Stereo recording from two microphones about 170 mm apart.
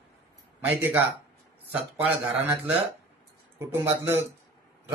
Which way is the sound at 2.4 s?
10° right (ahead or behind).